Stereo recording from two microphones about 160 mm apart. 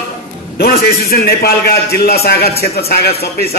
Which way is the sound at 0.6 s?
75° left (ahead or behind).